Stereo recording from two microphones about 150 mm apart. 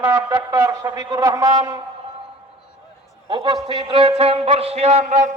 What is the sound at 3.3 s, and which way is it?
A man's voice, 30° right (ahead or behind).